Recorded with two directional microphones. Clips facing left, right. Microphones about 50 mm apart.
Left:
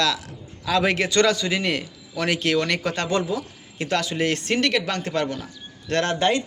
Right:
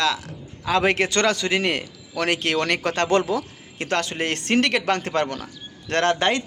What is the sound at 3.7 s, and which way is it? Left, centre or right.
A man's voice, right.